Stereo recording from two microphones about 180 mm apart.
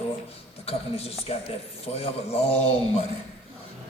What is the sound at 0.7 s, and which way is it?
A man's voice, 35° left (ahead or behind).